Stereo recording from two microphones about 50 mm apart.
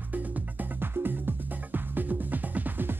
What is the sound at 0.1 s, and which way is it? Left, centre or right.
Music, right.